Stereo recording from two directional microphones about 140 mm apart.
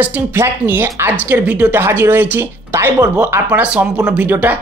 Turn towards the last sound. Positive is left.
turn(degrees=-10)  # may be behind; listen again after turning